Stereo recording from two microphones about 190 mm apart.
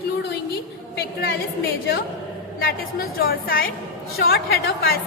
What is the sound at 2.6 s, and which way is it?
A woman's voice, 50° left (ahead or behind).